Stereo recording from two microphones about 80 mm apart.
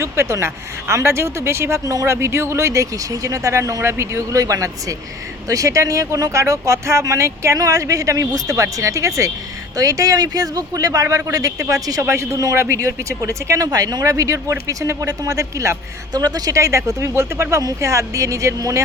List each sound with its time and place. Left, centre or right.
0.0 s speech: right
13.7 s speech: right
16.1 s speech: right
17.6 s speech: right